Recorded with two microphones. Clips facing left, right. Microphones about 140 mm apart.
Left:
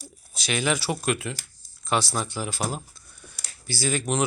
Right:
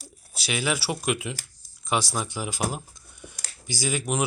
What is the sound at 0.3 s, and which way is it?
Speech, 10° right (ahead or behind).